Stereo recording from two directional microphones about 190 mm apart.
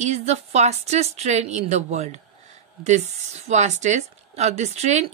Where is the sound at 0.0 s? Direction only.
35° right (ahead or behind).